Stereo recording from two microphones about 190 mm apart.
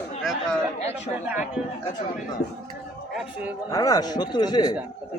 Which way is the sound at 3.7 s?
20° left (ahead or behind).